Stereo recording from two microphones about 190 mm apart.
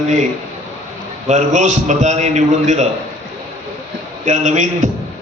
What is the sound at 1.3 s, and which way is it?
A man's voice, 40° right (ahead or behind).